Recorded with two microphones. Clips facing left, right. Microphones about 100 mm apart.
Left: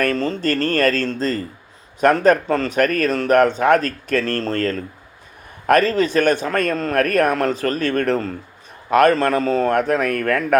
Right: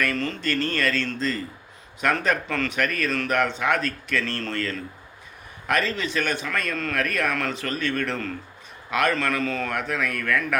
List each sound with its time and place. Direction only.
0.0 s speech: 35° left (ahead or behind)